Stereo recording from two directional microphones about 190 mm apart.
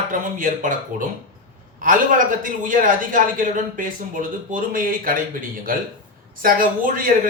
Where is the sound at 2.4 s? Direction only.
45° right (ahead or behind).